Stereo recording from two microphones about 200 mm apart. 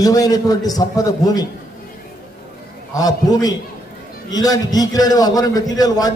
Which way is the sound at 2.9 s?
20° left (ahead or behind).